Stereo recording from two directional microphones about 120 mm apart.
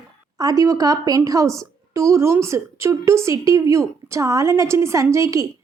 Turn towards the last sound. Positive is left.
turn(degrees=-25)  # may be behind; listen again after turning